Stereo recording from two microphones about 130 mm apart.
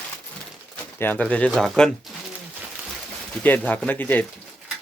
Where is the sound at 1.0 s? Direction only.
15° left (ahead or behind).